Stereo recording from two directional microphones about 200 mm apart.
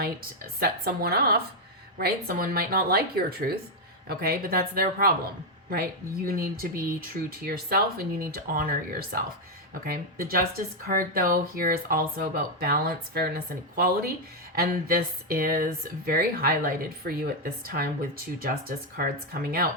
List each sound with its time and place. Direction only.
0.0 s speech: 50° right (ahead or behind)
18.9 s speech: 50° right (ahead or behind)